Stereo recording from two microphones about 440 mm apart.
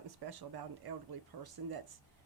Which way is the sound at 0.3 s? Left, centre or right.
Right.